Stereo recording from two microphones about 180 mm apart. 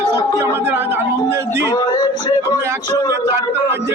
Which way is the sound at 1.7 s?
25° left (ahead or behind).